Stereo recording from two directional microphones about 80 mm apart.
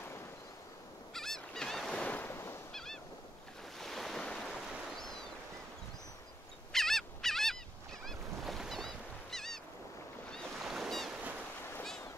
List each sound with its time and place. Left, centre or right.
1.1 s fowl: centre
2.0 s a sound: left
2.3 s fowl: left
2.7 s goose: centre
3.7 s waves: centre
6.7 s fowl: centre
10.6 s boat: centre